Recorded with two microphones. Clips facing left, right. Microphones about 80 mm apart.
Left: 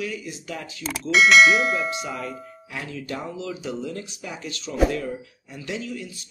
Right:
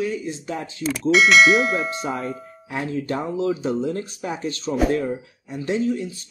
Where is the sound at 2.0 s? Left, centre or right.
Right.